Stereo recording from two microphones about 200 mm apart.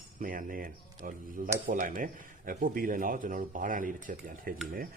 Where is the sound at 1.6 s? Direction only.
45° right (ahead or behind).